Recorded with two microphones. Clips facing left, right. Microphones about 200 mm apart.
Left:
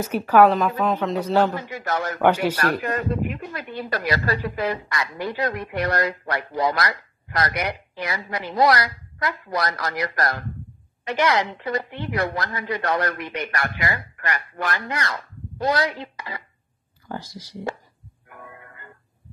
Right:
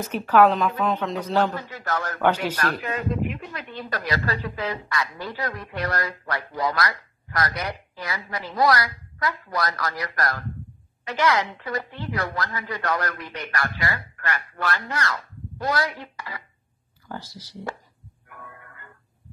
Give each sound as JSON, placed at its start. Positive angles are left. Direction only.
{"t": 0.0, "sound": "a man's voice", "side_deg": 10}
{"t": 1.9, "sound": "a woman's voice", "side_deg": 25}
{"t": 2.2, "sound": "a man's voice", "side_deg": 10}
{"t": 18.3, "sound": "music", "side_deg": 25}